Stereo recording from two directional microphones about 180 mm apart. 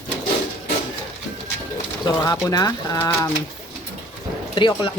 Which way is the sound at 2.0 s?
25° left (ahead or behind).